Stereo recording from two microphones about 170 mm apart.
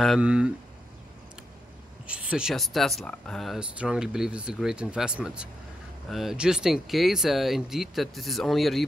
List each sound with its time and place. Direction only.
0.0 s speech: 5° right (ahead or behind)
2.0 s speech: 5° right (ahead or behind)